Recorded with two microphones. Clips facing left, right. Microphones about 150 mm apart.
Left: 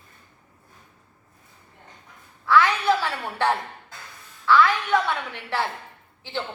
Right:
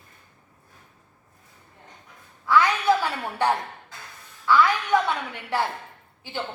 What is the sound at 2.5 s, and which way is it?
A woman's voice, 15° right (ahead or behind).